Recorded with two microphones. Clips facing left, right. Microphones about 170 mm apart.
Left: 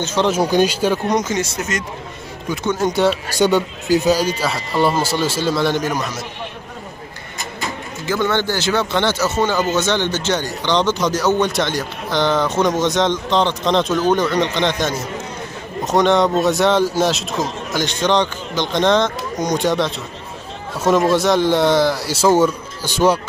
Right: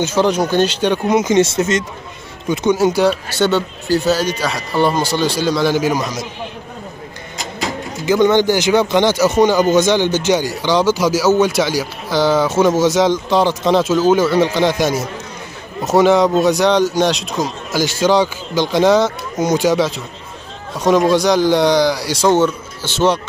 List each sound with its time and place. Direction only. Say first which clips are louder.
0.0 s speech: right 3 dB; 10° right (ahead or behind)
0.3 s speech: even; 10° left (ahead or behind)
1.2 s speech: right 8 dB; 25° right (ahead or behind)
2.5 s speech: right 5 dB; 15° right (ahead or behind)
2.9 s a man's voice: right 2 dB; centre (ahead or behind)
3.3 s speech: even; 15° left (ahead or behind)
4.4 s a man's voice: right 1 dB; 5° left (ahead or behind); by 6.2 s 10° right (ahead or behind)
8.1 s a man's voice: right 7 dB; 15° right (ahead or behind); by 23.2 s 10° left (ahead or behind)